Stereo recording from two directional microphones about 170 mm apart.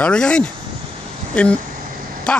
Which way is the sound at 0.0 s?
5° left (ahead or behind).